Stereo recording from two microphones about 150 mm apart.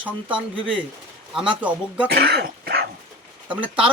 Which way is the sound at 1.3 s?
10° right (ahead or behind).